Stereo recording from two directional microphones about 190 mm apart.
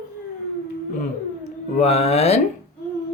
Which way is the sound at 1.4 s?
35° left (ahead or behind).